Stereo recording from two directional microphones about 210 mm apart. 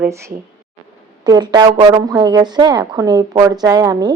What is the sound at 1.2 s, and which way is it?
Speech, 20° right (ahead or behind).